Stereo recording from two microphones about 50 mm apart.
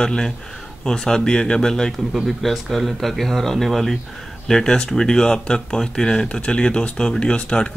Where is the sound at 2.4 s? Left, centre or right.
Centre.